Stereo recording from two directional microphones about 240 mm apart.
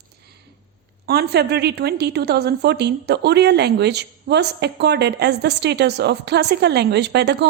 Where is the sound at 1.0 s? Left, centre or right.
Right.